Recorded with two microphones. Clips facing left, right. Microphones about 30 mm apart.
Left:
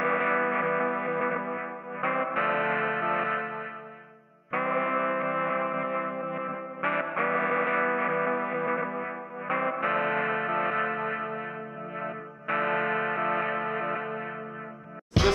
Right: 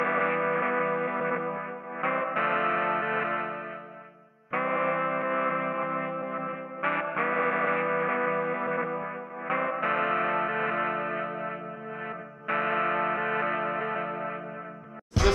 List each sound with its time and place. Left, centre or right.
0.0 s music: centre
12.4 s music: centre
15.2 s music: left